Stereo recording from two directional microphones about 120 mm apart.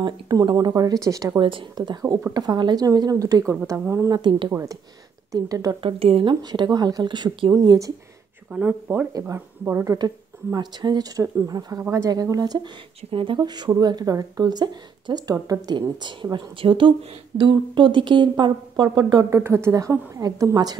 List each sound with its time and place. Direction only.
0.0 s a woman's voice: 40° right (ahead or behind)
1.4 s a woman's voice: 45° right (ahead or behind); by 4.2 s 25° right (ahead or behind)
4.2 s speech: 45° right (ahead or behind)
4.5 s a woman's voice: 25° right (ahead or behind)
5.8 s speech: 50° right (ahead or behind)
6.4 s a woman's voice: 35° right (ahead or behind)
8.5 s speech: 10° right (ahead or behind)
9.3 s a woman's voice: 25° right (ahead or behind)
9.9 s a woman's voice: 35° right (ahead or behind)
13.4 s a woman's voice: 35° right (ahead or behind)
19.3 s a woman's voice: 20° right (ahead or behind)